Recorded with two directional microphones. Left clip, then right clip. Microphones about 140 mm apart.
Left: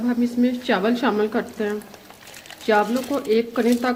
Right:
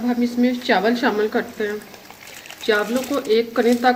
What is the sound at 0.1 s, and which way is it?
A woman's voice, 60° left (ahead or behind).